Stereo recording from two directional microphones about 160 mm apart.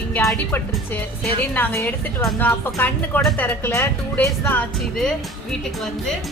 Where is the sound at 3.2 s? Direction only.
Centre (ahead or behind).